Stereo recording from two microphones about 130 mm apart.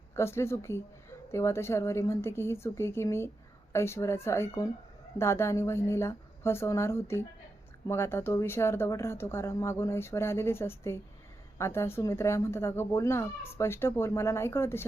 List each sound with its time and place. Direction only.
0.2 s speech: 20° left (ahead or behind)